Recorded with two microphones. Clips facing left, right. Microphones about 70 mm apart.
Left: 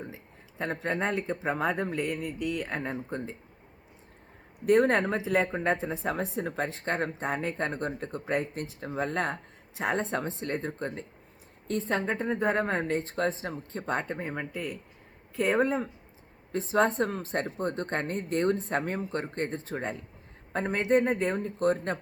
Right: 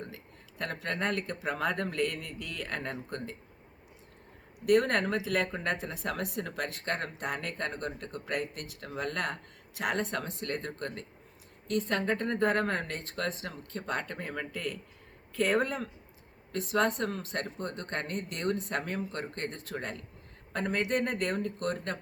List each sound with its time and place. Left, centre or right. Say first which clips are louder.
0.6 s speech: left 3 dB; left
4.6 s speech: left 3 dB; left